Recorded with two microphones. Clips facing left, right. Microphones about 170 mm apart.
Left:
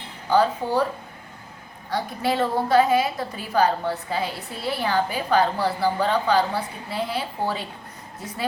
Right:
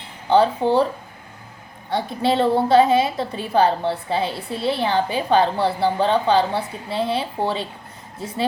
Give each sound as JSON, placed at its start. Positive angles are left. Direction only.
{"t": 0.3, "sound": "a woman's voice", "side_deg": -25}
{"t": 1.9, "sound": "a woman's voice", "side_deg": -25}